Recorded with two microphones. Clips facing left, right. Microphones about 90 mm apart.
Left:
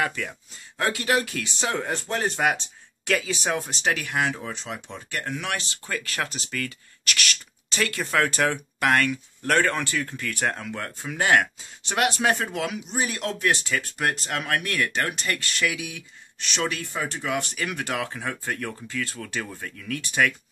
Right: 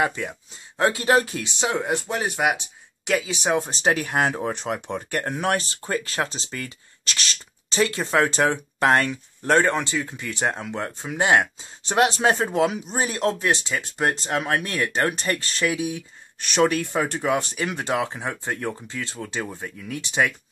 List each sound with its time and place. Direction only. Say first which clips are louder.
0.0 s speech: right 3 dB; 20° right (ahead or behind)
13.5 s speech: right 1 dB; 25° right (ahead or behind)
16.3 s speech: right 8 dB; 45° right (ahead or behind)
17.2 s speech: right 4 dB; 35° right (ahead or behind)